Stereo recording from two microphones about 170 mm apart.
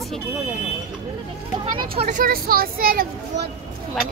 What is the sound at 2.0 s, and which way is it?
Speech, 55° right (ahead or behind).